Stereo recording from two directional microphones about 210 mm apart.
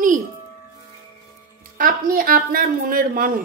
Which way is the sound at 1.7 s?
40° right (ahead or behind).